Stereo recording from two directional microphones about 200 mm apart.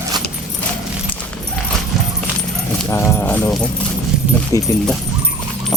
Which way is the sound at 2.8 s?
10° left (ahead or behind).